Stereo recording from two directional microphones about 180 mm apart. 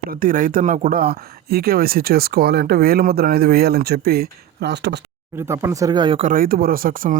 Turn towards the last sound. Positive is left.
turn(degrees=-50)  # may be behind; listen again after turning